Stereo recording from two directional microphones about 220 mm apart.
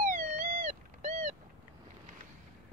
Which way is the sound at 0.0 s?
40° right (ahead or behind).